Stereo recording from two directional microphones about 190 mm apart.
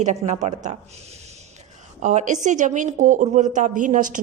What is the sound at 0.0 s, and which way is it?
Speech, 40° right (ahead or behind).